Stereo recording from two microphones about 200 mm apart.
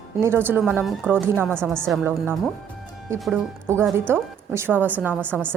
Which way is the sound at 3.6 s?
10° right (ahead or behind).